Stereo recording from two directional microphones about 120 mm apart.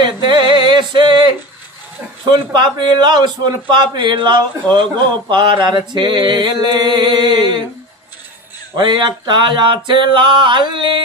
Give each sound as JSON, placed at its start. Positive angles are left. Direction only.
{"t": 0.0, "sound": "a sound", "side_deg": -40}
{"t": 2.5, "sound": "a man's voice", "side_deg": -40}
{"t": 8.8, "sound": "a man's voice", "side_deg": -40}